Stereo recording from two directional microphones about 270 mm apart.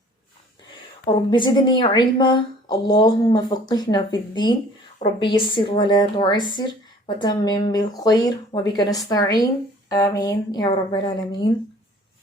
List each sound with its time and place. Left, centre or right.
1.0 s a woman's voice: centre